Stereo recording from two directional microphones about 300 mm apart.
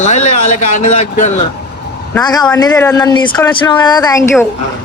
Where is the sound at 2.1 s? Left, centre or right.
Centre.